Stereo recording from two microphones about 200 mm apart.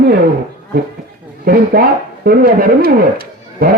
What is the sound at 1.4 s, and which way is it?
Speech, 50° right (ahead or behind).